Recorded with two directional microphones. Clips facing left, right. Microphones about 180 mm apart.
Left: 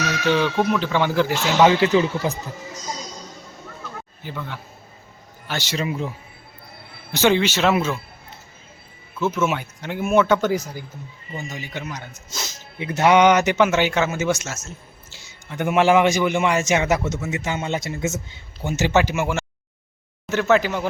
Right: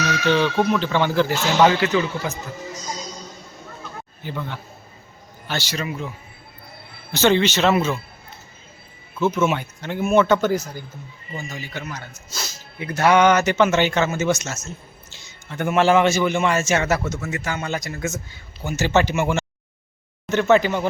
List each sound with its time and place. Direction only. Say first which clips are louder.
0.3 s speech: right 1 dB; 10° left (ahead or behind)
2.0 s speech: left 3 dB; 35° left (ahead or behind)
4.2 s speech: right 3 dB; 5° left (ahead or behind)
5.5 s a man's voice: right 1 dB; 15° left (ahead or behind)
5.7 s a man's voice: left 6 dB; 25° left (ahead or behind)
7.1 s speech: right 1 dB; 10° left (ahead or behind)
9.1 s speech: right 2 dB; centre (ahead or behind)
11.3 s a man's voice: left 1 dB; 20° left (ahead or behind)
18.9 s speech: right 2 dB; 5° left (ahead or behind)